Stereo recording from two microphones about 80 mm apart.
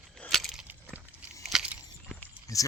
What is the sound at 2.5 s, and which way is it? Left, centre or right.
Speech, left.